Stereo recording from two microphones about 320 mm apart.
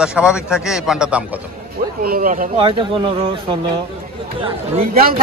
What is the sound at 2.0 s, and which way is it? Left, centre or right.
Speech, right.